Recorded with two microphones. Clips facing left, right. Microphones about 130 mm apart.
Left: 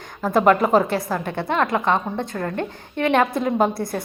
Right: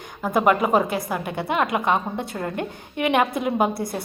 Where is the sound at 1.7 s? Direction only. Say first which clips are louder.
Left 1 dB; 10° right (ahead or behind).